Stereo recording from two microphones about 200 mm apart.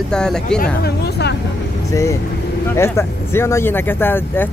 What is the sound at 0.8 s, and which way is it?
Speech, 55° left (ahead or behind).